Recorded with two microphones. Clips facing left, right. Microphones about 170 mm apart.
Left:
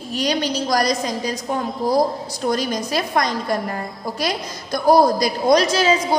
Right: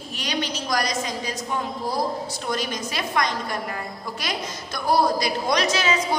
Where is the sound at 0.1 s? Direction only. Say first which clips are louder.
Left 7 dB; 40° left (ahead or behind).